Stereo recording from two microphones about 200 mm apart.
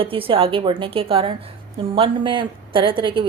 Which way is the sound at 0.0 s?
25° right (ahead or behind).